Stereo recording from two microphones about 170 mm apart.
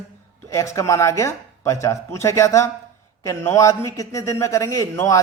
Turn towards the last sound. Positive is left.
turn(degrees=20)  # may be behind; listen again after turning